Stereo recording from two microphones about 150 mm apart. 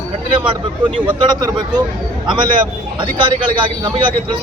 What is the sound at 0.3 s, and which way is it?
A man's voice, 35° right (ahead or behind).